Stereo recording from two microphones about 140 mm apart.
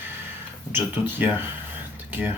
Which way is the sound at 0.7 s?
15° right (ahead or behind).